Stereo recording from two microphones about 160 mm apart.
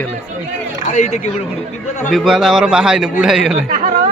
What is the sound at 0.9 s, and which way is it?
Speech, 45° left (ahead or behind).